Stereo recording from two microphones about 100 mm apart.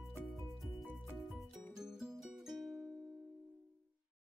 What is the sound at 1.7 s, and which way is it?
Music, 5° right (ahead or behind).